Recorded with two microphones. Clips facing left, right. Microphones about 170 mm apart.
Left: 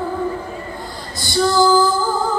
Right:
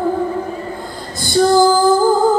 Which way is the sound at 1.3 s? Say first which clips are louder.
Right 3 dB; 50° right (ahead or behind).